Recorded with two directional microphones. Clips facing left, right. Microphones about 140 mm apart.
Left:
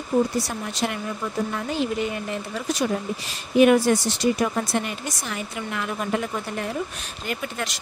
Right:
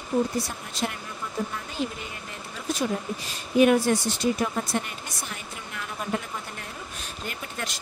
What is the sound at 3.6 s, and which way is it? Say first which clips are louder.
Speech: left 3 dB; 90° left.